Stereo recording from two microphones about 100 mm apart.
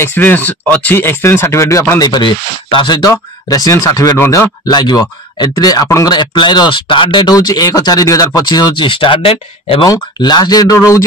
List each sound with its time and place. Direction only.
0.0 s speech: 20° left (ahead or behind)
4.6 s speech: 45° left (ahead or behind); by 9.8 s 70° left (ahead or behind)
9.8 s speech: 40° left (ahead or behind)